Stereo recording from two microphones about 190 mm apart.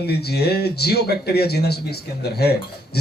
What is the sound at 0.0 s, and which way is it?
Speech, 60° left (ahead or behind).